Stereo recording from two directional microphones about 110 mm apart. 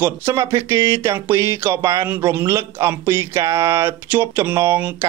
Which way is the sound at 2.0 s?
20° right (ahead or behind).